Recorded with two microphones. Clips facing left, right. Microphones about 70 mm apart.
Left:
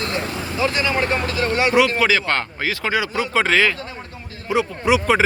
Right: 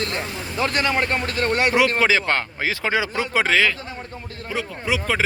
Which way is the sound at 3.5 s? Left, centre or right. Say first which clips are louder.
Left 1 dB; centre.